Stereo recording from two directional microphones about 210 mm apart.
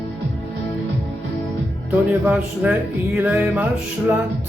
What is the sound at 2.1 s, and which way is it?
Speech, 5° right (ahead or behind).